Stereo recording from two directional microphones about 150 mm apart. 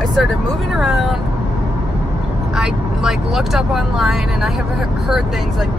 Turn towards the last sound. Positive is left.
turn(degrees=0)  # may be behind; listen again after turning